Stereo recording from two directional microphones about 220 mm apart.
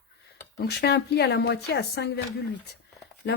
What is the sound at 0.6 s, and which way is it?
Speech, 50° left (ahead or behind).